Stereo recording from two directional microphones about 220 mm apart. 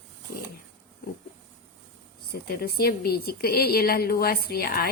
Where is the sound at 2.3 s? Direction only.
45° left (ahead or behind).